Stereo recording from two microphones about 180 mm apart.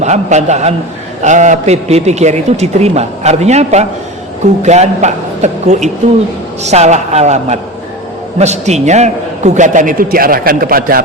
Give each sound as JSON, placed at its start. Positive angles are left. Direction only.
{"t": 0.0, "sound": "a man's voice", "side_deg": -40}